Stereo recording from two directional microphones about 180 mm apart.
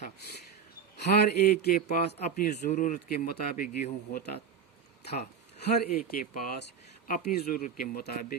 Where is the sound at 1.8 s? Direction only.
40° left (ahead or behind).